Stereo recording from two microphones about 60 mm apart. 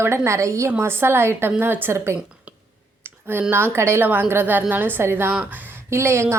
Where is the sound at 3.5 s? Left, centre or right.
Right.